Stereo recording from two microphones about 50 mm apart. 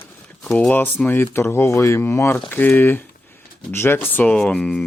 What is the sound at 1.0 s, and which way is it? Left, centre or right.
Speech, left.